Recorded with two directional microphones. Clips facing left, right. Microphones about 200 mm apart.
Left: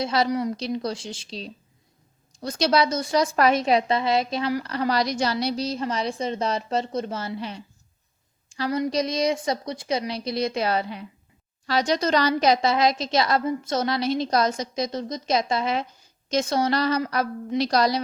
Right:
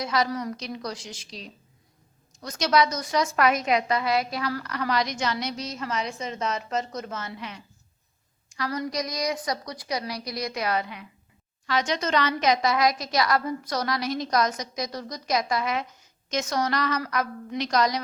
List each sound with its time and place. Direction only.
0.0 s a woman's voice: 30° left (ahead or behind)
0.3 s a woman's voice: 20° left (ahead or behind)
0.5 s a woman's voice: 30° left (ahead or behind)